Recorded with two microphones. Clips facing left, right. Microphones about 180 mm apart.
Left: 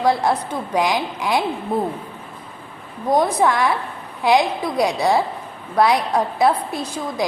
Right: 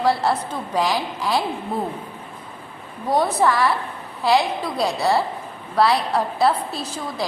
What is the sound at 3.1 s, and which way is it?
A woman's voice, 15° left (ahead or behind).